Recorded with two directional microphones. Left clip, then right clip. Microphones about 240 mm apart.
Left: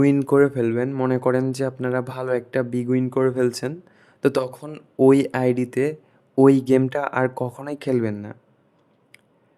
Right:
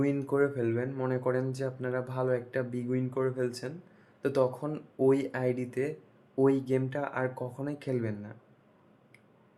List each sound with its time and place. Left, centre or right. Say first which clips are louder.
0.0 s speech: left 11 dB; left